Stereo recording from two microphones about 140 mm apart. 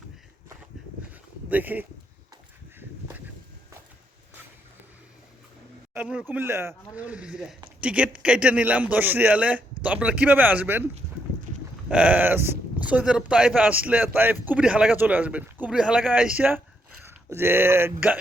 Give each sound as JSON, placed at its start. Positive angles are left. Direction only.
{"t": 1.5, "sound": "speech", "side_deg": -10}
{"t": 5.9, "sound": "speech", "side_deg": -10}
{"t": 11.9, "sound": "speech", "side_deg": -10}